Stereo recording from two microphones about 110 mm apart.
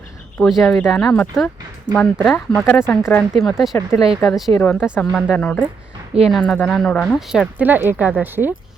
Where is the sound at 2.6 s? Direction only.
20° left (ahead or behind).